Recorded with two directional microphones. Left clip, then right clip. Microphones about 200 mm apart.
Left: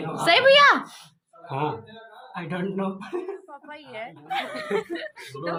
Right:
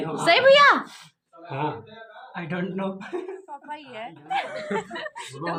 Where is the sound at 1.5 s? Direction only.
45° left (ahead or behind).